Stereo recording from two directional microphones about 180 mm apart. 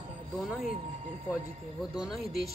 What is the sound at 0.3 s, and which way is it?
Speech, centre (ahead or behind).